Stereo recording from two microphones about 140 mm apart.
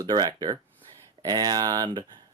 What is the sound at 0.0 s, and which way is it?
Speech, 30° right (ahead or behind).